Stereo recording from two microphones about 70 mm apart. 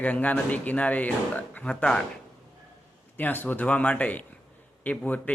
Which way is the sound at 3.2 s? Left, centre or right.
Left.